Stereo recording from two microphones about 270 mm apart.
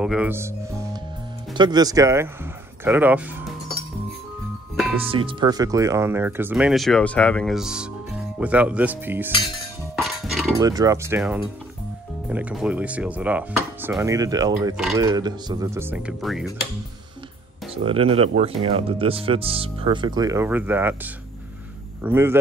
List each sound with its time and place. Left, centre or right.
0.0 s speech: centre
1.5 s speech: centre
4.9 s speech: centre
9.9 s a sound: centre
10.6 s speech: centre
17.8 s speech: centre